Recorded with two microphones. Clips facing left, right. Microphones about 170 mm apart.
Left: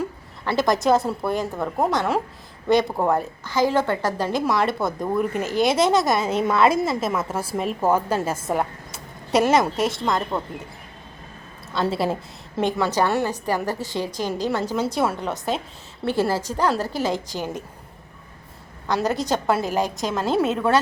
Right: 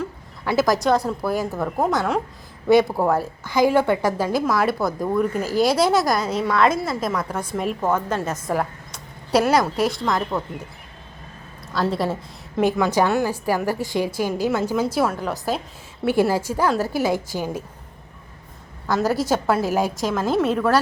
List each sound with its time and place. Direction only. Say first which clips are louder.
0.4 s a woman's voice: right 1 dB; 5° right (ahead or behind)
6.2 s a woman's voice: left 1 dB; 25° left (ahead or behind)
7.0 s a woman's voice: even; 5° left (ahead or behind)
11.8 s a woman's voice: even; centre (ahead or behind)
16.0 s a woman's voice: right 3 dB; 10° right (ahead or behind)
18.9 s a woman's voice: right 2 dB; centre (ahead or behind)